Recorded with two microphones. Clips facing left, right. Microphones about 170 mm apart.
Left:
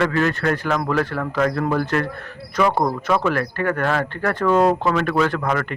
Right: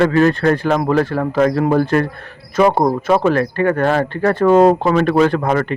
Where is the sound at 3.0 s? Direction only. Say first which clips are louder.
Right 6 dB; 25° right (ahead or behind).